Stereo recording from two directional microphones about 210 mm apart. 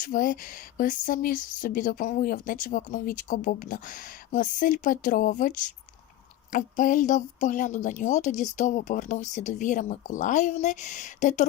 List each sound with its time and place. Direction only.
0.0 s speech: 40° left (ahead or behind)